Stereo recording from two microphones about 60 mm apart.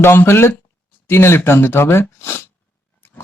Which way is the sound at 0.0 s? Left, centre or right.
Left.